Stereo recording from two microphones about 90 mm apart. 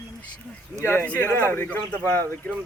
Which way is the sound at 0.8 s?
20° left (ahead or behind).